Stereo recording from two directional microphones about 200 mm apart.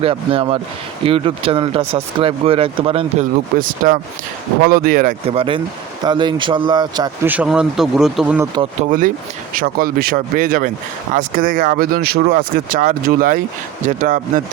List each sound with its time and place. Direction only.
0.0 s speech: 25° right (ahead or behind)
3.5 s speech: 45° right (ahead or behind)
5.3 s speech: 30° right (ahead or behind)
7.3 s speech: 5° right (ahead or behind)
8.9 s speech: 40° right (ahead or behind)